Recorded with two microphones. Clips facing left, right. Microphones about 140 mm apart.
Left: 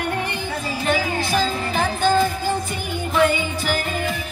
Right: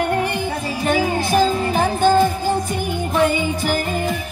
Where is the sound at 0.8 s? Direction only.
45° right (ahead or behind).